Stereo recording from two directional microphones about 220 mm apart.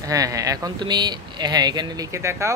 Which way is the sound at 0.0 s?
15° right (ahead or behind).